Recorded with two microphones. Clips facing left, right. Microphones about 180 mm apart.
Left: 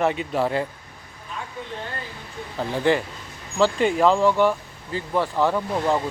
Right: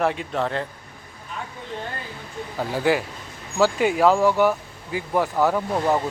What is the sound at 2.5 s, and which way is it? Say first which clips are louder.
Speech: even; 5° right (ahead or behind).